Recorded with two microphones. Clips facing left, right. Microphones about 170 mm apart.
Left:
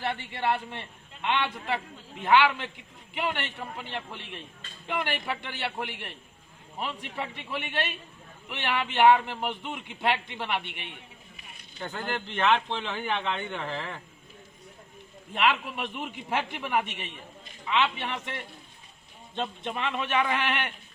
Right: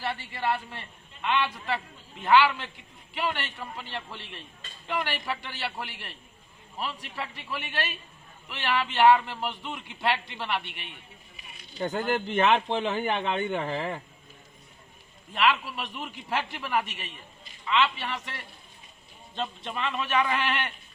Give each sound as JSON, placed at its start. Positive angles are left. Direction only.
{"t": 0.0, "sound": "a man's voice", "side_deg": 20}
{"t": 11.8, "sound": "speech", "side_deg": -45}
{"t": 15.3, "sound": "a man's voice", "side_deg": 20}
{"t": 19.4, "sound": "a man's voice", "side_deg": 15}